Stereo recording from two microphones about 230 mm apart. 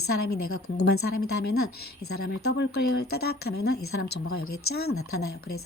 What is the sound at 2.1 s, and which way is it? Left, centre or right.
Speech, left.